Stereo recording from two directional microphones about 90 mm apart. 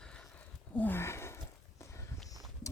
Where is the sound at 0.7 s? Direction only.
20° left (ahead or behind).